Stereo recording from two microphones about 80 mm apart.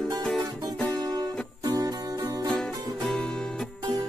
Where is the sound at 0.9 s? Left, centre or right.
Right.